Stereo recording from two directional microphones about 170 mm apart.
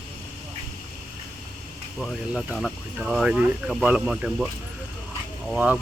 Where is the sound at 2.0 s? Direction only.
Centre (ahead or behind).